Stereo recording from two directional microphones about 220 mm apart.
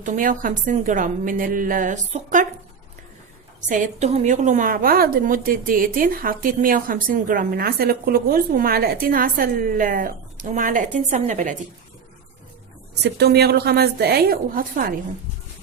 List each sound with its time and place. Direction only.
0.0 s a woman's voice: 35° right (ahead or behind)
3.6 s a woman's voice: 35° right (ahead or behind)
12.9 s a woman's voice: 50° right (ahead or behind)